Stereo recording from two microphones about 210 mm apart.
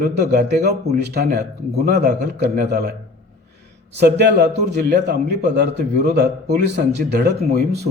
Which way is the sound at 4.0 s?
55° right (ahead or behind).